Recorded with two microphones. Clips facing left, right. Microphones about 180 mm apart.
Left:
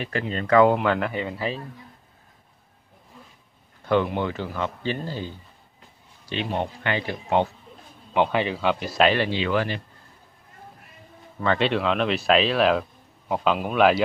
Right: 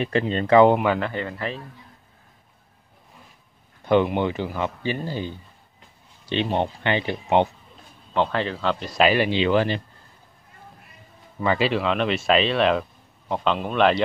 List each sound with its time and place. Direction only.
0.0 s speech: 25° right (ahead or behind)
0.7 s speech: 5° right (ahead or behind)
3.8 s speech: 20° right (ahead or behind)
6.2 s speech: 25° right (ahead or behind)
8.1 s a man's voice: 15° left (ahead or behind)
8.9 s speech: 5° right (ahead or behind)
9.2 s speech: 20° right (ahead or behind)
11.4 s speech: 5° right (ahead or behind)